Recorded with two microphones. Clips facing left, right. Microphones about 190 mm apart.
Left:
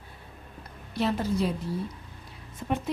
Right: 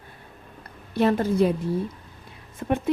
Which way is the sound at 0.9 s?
55° right (ahead or behind).